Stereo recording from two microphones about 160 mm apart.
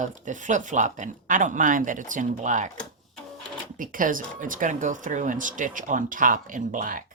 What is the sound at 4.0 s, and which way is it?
Speech, 55° right (ahead or behind).